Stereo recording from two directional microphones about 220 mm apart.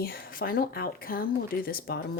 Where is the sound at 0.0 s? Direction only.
40° left (ahead or behind).